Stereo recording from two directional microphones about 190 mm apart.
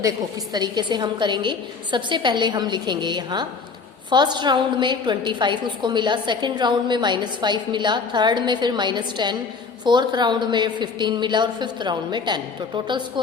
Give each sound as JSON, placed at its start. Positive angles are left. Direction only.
{"t": 0.5, "sound": "a woman's voice", "side_deg": -20}